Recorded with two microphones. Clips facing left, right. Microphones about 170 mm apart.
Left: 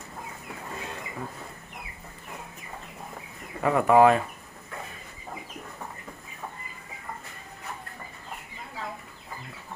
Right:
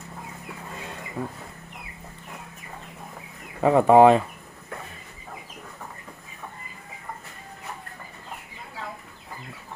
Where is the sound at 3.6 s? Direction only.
25° right (ahead or behind).